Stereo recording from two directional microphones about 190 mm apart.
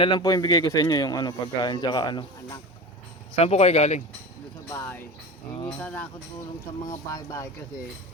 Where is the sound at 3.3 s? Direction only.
35° left (ahead or behind).